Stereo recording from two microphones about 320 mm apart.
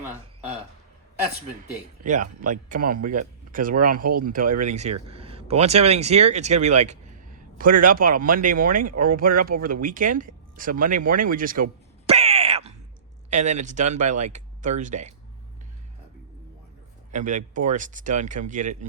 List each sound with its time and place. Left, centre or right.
2.4 s speech: right
12.0 s a sound: centre
13.3 s speech: right
17.1 s speech: right